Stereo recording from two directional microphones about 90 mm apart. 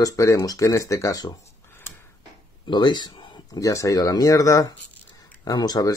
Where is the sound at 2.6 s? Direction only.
55° left (ahead or behind).